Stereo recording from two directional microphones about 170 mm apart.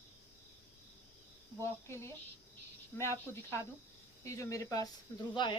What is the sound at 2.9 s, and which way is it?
Speech, 15° left (ahead or behind).